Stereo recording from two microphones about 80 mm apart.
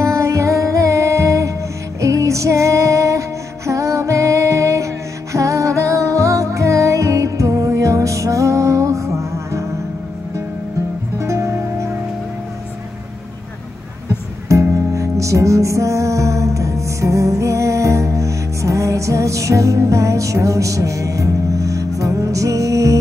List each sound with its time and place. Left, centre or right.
0.0 s music: right
11.1 s music: right
14.5 s music: right